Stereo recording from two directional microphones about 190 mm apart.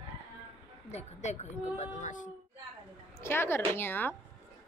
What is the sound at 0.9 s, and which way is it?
A woman's voice, 35° left (ahead or behind).